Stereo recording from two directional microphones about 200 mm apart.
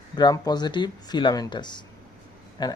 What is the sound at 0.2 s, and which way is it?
Speech, 20° left (ahead or behind).